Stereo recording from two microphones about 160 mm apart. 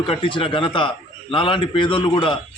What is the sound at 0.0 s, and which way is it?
A man's voice, 30° left (ahead or behind).